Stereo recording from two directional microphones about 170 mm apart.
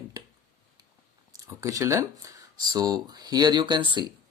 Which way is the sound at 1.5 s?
15° right (ahead or behind).